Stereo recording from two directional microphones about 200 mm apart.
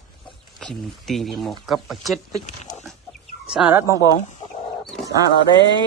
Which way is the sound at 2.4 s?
40° left (ahead or behind).